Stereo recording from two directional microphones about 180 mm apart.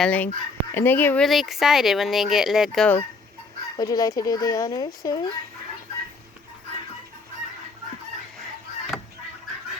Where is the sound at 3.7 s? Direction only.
20° left (ahead or behind).